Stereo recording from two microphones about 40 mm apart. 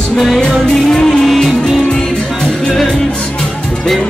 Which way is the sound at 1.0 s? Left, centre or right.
Centre.